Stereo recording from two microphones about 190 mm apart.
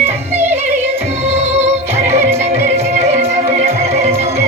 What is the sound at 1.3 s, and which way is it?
Music, 35° right (ahead or behind).